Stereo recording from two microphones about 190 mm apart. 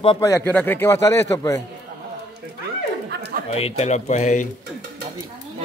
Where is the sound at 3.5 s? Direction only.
30° left (ahead or behind).